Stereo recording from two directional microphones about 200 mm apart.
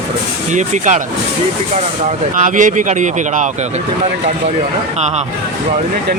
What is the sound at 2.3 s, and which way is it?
Speech, 40° right (ahead or behind).